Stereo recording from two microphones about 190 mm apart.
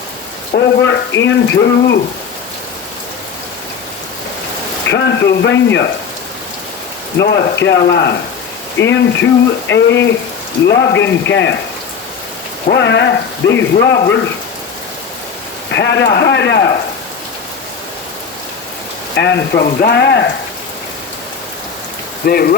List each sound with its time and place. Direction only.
0.5 s speech: 65° left (ahead or behind)
4.9 s speech: 65° left (ahead or behind)
7.2 s speech: 65° left (ahead or behind)
12.7 s speech: 70° left (ahead or behind)
15.7 s speech: 65° left (ahead or behind)
19.1 s speech: 65° left (ahead or behind)
22.3 s speech: 50° left (ahead or behind)